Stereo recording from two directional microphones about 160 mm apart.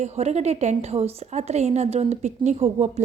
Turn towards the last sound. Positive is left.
turn(degrees=-40)  # may be behind; listen again after turning